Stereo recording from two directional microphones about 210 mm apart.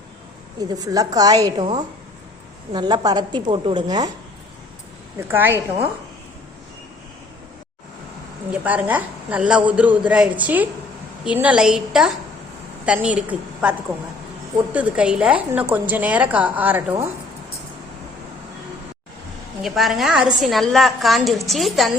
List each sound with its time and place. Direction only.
0.7 s a woman's voice: 15° right (ahead or behind)
5.3 s a woman's voice: 10° right (ahead or behind)
8.5 s a woman's voice: 5° right (ahead or behind)
19.6 s a woman's voice: centre (ahead or behind)